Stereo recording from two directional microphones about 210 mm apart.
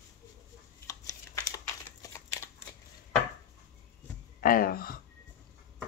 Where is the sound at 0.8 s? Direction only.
15° left (ahead or behind).